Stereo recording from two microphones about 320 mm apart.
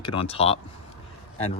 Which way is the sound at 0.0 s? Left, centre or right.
Centre.